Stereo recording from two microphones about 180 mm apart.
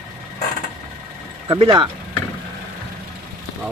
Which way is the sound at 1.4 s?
25° right (ahead or behind).